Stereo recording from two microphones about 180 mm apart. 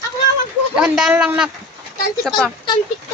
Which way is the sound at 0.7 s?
5° right (ahead or behind).